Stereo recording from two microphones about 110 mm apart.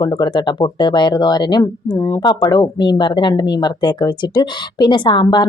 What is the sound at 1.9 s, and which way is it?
Speech, 30° left (ahead or behind).